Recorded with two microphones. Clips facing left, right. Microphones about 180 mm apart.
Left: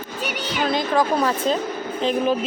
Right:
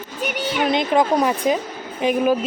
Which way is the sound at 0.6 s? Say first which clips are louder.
Right 2 dB; 20° right (ahead or behind).